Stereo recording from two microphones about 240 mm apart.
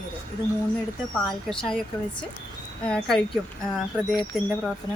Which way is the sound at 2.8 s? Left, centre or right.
Centre.